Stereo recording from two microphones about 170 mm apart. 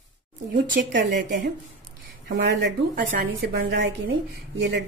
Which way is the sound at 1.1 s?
50° right (ahead or behind).